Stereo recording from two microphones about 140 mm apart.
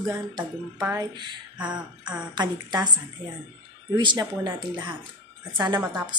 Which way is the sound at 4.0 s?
35° right (ahead or behind).